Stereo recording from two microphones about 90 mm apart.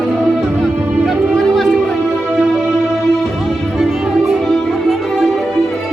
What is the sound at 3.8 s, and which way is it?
Music, 5° right (ahead or behind).